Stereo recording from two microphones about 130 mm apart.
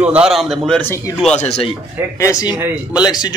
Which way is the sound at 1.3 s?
50° left (ahead or behind).